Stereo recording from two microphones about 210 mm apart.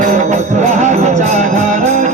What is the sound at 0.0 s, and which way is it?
Music, 35° right (ahead or behind).